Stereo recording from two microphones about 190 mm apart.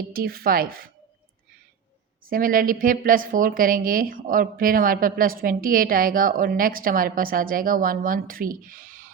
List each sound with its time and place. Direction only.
0.0 s a woman's voice: 50° right (ahead or behind)
2.2 s a woman's voice: 45° right (ahead or behind)